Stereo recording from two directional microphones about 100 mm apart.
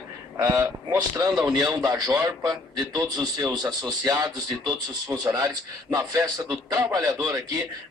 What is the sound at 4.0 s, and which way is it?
A man's voice, 40° right (ahead or behind).